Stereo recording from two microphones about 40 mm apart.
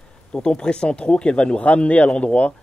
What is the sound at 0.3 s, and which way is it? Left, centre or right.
Speech, left.